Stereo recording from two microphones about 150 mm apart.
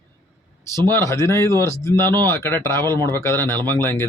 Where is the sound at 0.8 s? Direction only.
15° left (ahead or behind).